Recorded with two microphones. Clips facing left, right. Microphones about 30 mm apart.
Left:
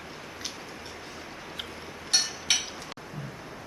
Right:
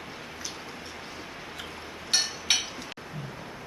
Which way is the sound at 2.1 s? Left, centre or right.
Centre.